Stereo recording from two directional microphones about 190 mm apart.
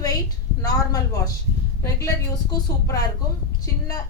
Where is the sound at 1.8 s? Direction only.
15° left (ahead or behind).